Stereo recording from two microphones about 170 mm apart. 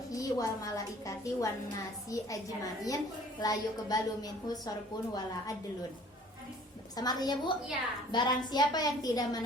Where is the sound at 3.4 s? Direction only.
20° left (ahead or behind).